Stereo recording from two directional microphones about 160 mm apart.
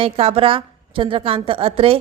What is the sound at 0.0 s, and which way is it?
A woman's voice, 35° right (ahead or behind).